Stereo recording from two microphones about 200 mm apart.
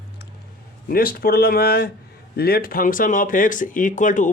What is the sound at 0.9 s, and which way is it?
A man's voice, 50° left (ahead or behind).